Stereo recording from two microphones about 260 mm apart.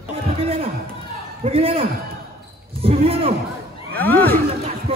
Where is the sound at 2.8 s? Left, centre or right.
Right.